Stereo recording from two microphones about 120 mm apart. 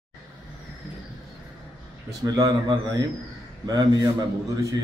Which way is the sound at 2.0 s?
30° right (ahead or behind).